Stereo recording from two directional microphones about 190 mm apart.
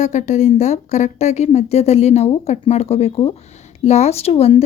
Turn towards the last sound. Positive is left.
turn(degrees=30)  # may be behind; listen again after turning